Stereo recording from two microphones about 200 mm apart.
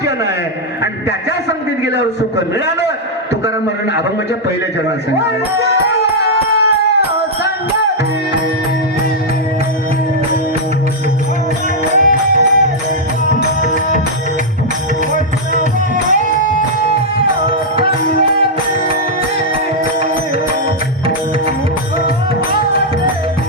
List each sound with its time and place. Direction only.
5.9 s music: 55° left (ahead or behind)
11.9 s music: 40° right (ahead or behind)